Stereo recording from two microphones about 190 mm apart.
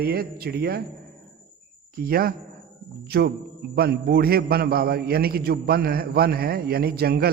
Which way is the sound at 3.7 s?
55° right (ahead or behind).